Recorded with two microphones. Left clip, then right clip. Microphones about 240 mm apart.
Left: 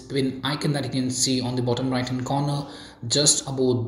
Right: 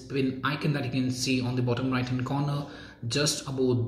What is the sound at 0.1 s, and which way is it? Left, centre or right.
Speech, centre.